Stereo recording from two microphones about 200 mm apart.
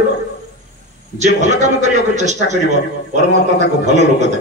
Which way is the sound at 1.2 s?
35° right (ahead or behind).